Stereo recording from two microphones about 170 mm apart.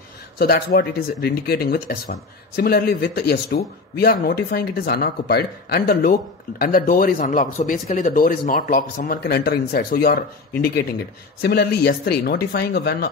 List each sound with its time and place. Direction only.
0.4 s speech: 65° left (ahead or behind)